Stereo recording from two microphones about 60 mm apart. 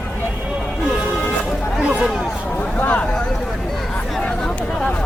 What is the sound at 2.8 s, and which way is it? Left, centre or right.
Speech, left.